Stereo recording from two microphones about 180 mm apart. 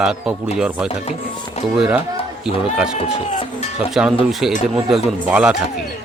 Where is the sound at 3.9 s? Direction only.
5° right (ahead or behind).